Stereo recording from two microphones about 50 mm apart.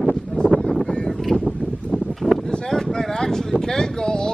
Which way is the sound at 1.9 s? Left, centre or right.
Centre.